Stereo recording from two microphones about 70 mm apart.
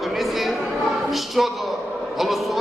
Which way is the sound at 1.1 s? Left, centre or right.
Centre.